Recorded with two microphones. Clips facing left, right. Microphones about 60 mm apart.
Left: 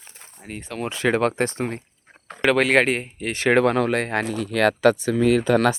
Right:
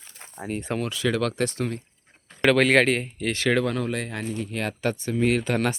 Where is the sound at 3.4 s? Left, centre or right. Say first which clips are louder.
Left 7 dB; left.